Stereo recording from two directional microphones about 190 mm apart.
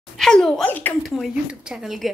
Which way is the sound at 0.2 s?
5° left (ahead or behind).